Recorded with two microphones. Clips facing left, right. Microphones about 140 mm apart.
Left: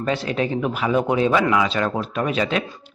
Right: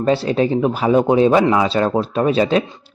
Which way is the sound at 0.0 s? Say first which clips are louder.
Right 6 dB; 30° right (ahead or behind).